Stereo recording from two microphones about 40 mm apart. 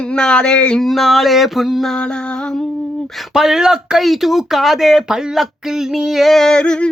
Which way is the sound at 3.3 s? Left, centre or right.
Centre.